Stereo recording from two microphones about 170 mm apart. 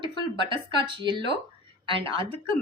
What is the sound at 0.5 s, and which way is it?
A woman's voice, 30° right (ahead or behind).